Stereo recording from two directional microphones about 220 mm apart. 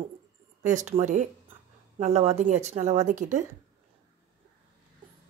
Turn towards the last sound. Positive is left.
turn(degrees=-35)  # may be behind; listen again after turning